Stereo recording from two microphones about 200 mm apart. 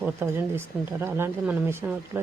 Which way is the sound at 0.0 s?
10° right (ahead or behind).